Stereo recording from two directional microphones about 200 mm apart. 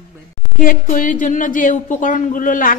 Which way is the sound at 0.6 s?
40° left (ahead or behind).